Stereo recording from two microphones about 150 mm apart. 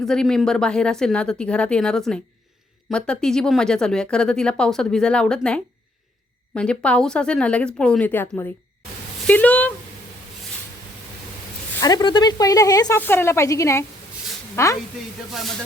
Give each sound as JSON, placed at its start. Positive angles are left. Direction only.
{"t": 0.0, "sound": "a woman's voice", "side_deg": 5}
{"t": 11.8, "sound": "speech", "side_deg": 25}
{"t": 13.0, "sound": "a woman's voice", "side_deg": 15}
{"t": 15.3, "sound": "a woman's voice", "side_deg": 0}